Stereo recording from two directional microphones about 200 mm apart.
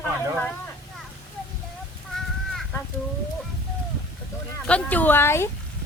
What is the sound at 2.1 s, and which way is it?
Crow, centre (ahead or behind).